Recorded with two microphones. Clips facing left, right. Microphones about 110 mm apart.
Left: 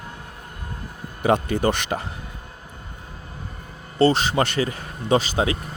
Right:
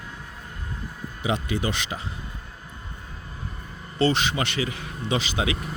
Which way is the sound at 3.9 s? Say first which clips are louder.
Left 5 dB; 40° left (ahead or behind).